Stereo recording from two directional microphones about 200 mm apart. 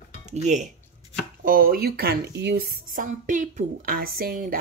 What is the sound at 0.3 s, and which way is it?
Speech, 35° right (ahead or behind).